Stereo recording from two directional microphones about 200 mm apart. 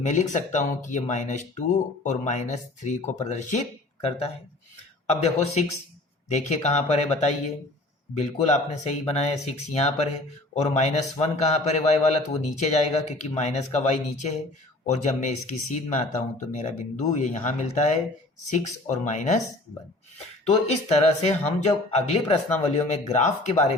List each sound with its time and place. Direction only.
0.0 s a man's voice: 35° left (ahead or behind)
20.5 s a man's voice: 35° left (ahead or behind)